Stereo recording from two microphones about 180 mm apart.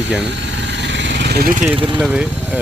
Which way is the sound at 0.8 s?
80° right.